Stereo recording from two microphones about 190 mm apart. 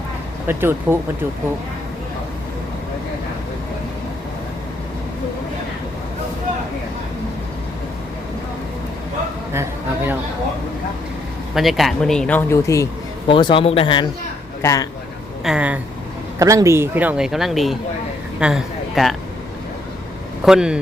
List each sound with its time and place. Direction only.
0.4 s a man's voice: 10° right (ahead or behind)
9.5 s a man's voice: 10° right (ahead or behind)
11.5 s speech: centre (ahead or behind); by 13.3 s 15° left (ahead or behind)
13.3 s a man's voice: 25° left (ahead or behind)
15.4 s a man's voice: 5° right (ahead or behind)
16.4 s a man's voice: 15° right (ahead or behind)
20.4 s speech: 5° right (ahead or behind)